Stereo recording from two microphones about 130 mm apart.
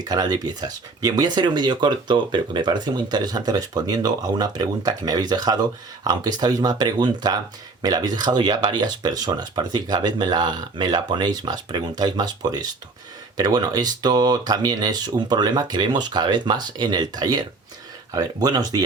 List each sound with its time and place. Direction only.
0.0 s speech: 30° right (ahead or behind)